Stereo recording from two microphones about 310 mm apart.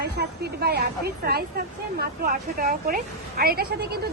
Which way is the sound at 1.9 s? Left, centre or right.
Right.